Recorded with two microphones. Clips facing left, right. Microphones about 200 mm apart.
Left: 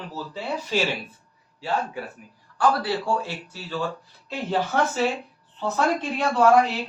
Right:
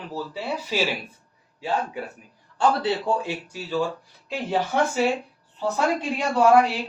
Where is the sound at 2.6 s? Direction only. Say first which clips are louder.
Right 1 dB; 20° right (ahead or behind).